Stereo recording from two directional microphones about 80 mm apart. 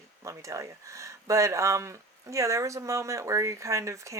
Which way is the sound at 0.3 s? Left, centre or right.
Right.